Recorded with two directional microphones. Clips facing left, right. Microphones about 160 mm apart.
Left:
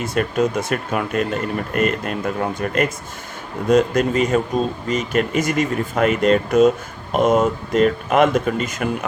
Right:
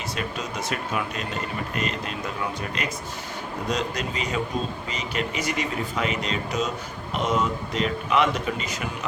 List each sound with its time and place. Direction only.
0.0 s speech: 50° left (ahead or behind)